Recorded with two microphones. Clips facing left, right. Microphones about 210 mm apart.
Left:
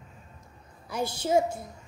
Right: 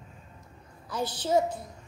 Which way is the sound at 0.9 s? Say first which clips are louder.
Left 1 dB; 10° left (ahead or behind).